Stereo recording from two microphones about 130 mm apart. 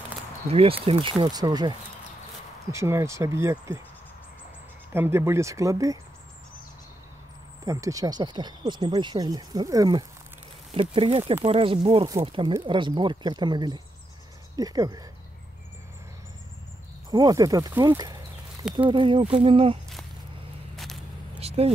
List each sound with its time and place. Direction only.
0.5 s speech: 50° right (ahead or behind)
1.3 s speech: 30° right (ahead or behind)
4.9 s speech: 20° right (ahead or behind)
7.6 s speech: 25° right (ahead or behind)
10.7 s speech: 45° right (ahead or behind); by 15.0 s 30° right (ahead or behind)
17.1 s speech: 30° right (ahead or behind); by 19.8 s 45° right (ahead or behind)
20.7 s a sound: centre (ahead or behind)
21.4 s vehicle: 50° right (ahead or behind)